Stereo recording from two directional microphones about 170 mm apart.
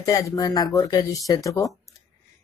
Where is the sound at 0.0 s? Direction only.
20° left (ahead or behind).